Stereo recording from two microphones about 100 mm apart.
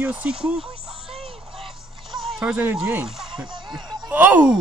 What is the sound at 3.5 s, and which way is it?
Music, 50° right (ahead or behind).